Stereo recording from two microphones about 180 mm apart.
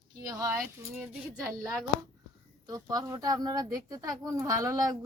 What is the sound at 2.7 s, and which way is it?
Speech, 20° right (ahead or behind).